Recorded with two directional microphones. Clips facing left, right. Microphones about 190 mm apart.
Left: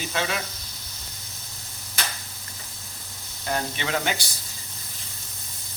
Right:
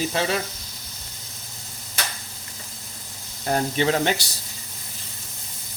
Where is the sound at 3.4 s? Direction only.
40° right (ahead or behind).